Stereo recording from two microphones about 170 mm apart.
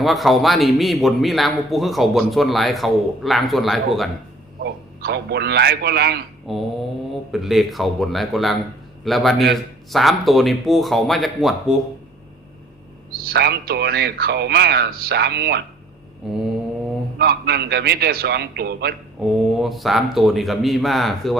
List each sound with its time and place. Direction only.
0.0 s a man's voice: centre (ahead or behind)
4.6 s a man's voice: 70° right (ahead or behind)
6.5 s a man's voice: centre (ahead or behind)
13.2 s a man's voice: 70° right (ahead or behind)
16.2 s a man's voice: 5° right (ahead or behind)
17.2 s a man's voice: 65° right (ahead or behind)
19.2 s a man's voice: centre (ahead or behind)